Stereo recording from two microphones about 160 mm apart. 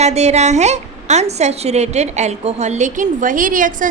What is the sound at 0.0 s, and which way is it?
A woman's voice, 45° right (ahead or behind).